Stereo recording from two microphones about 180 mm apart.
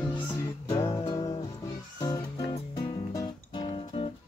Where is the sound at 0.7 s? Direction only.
20° left (ahead or behind).